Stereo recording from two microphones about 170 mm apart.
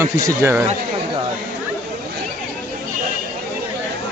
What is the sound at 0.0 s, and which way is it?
Speech, 15° right (ahead or behind).